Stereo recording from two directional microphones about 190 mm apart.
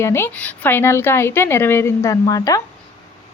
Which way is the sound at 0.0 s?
15° left (ahead or behind).